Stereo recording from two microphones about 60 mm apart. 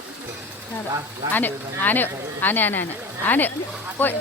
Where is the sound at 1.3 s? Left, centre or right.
Left.